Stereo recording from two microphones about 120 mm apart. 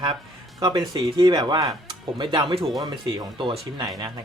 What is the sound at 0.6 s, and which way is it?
Speech, 35° right (ahead or behind).